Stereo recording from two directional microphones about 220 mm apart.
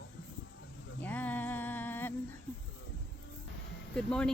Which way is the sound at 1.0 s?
5° left (ahead or behind).